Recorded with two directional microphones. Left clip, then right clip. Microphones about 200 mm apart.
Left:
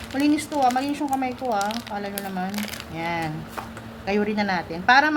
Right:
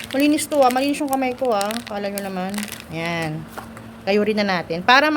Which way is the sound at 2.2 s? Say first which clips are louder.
Right 2 dB; 50° right (ahead or behind).